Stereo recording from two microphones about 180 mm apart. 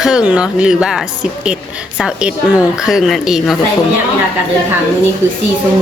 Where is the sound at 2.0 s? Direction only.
5° right (ahead or behind).